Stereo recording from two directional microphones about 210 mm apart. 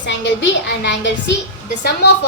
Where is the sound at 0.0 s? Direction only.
60° left (ahead or behind).